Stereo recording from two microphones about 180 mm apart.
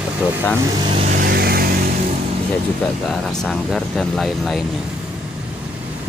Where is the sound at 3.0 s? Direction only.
Centre (ahead or behind).